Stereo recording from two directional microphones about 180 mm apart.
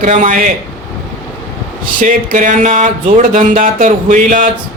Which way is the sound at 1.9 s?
45° right (ahead or behind).